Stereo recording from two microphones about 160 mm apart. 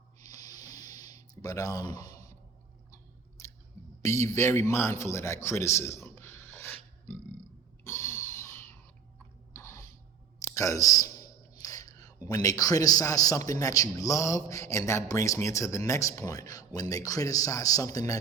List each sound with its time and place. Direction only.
0.3 s music: 25° left (ahead or behind)
2.9 s chewing: 20° left (ahead or behind)
4.0 s a man's voice: 20° left (ahead or behind)
7.9 s a sound: 15° left (ahead or behind)
10.4 s a man's voice: 20° left (ahead or behind)